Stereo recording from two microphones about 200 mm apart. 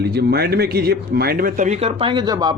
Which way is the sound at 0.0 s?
55° right (ahead or behind).